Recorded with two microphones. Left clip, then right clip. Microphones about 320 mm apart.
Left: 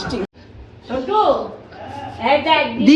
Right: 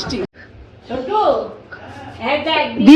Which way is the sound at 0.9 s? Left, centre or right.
Centre.